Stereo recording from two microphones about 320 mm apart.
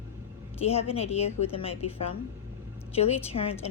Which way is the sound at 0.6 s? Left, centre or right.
Centre.